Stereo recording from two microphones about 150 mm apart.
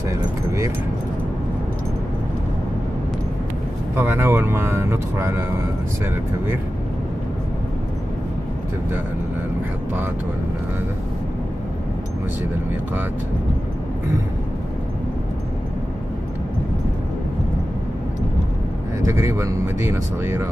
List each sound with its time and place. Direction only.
0.1 s speech: 20° right (ahead or behind)
3.9 s speech: 15° right (ahead or behind)
19.0 s speech: 20° right (ahead or behind)